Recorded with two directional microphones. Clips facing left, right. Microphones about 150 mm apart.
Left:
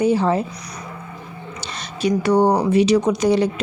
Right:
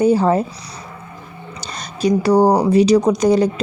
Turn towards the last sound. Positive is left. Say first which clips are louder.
# right 3 dB
turn(degrees=-40)  # may be behind; listen again after turning